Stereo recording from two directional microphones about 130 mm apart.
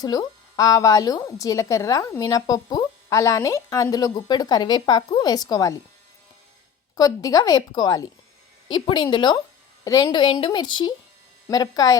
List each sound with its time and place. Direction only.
0.0 s speech: 30° left (ahead or behind)
6.9 s a woman's voice: 25° left (ahead or behind)